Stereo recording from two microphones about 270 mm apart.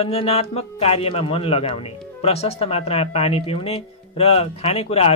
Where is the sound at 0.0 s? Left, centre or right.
Left.